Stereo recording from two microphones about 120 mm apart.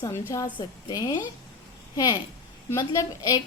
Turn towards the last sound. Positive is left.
turn(degrees=25)  # may be behind; listen again after turning